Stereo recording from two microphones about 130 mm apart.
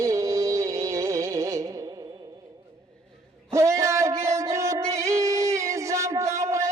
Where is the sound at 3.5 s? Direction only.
25° right (ahead or behind).